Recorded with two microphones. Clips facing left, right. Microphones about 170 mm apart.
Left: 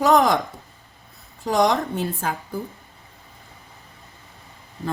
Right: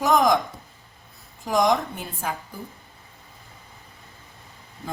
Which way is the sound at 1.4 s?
70° left (ahead or behind).